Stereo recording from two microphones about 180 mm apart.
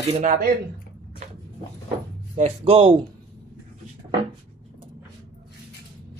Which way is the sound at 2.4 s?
35° right (ahead or behind).